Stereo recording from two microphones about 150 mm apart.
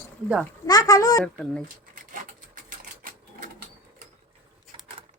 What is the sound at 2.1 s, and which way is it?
Sewing machine, 60° right (ahead or behind).